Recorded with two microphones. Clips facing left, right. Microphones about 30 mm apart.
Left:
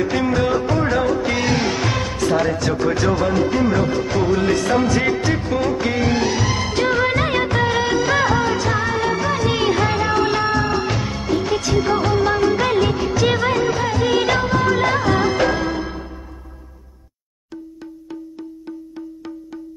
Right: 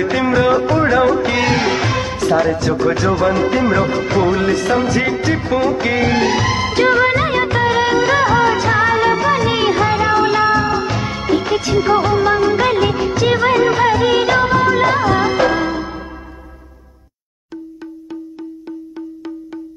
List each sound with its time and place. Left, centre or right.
0.0 s music: right
1.9 s music: centre
2.8 s music of bollywood: centre
3.3 s music: right
4.5 s music of bollywood: centre
8.4 s music of bollywood: right
11.0 s music of bollywood: right
13.6 s music of bollywood: right
14.0 s music of bollywood: centre